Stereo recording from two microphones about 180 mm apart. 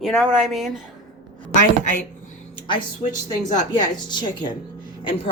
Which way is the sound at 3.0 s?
35° left (ahead or behind).